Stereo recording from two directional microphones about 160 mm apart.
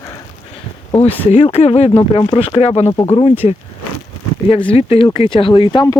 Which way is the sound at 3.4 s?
40° left (ahead or behind).